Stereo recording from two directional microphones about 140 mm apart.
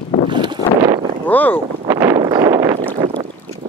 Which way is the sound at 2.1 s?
35° right (ahead or behind).